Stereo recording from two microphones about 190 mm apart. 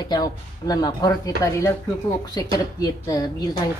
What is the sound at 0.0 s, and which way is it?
A woman's voice, 20° left (ahead or behind).